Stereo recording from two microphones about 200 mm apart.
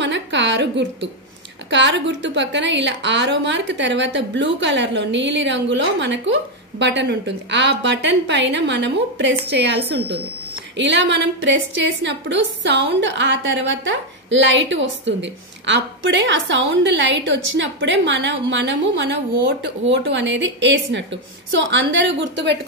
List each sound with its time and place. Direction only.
0.0 s a woman's voice: 65° right (ahead or behind)
19.9 s a woman's voice: 65° right (ahead or behind)